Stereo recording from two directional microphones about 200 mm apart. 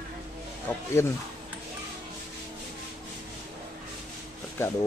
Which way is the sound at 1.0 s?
15° left (ahead or behind).